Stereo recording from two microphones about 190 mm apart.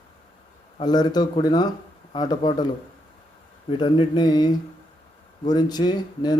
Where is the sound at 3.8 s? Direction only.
25° left (ahead or behind).